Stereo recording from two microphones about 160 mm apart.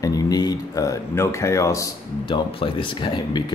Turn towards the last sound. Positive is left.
turn(degrees=30)  # may be behind; listen again after turning